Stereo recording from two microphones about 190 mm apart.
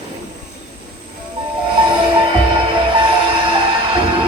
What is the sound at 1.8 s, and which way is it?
Music, 25° right (ahead or behind).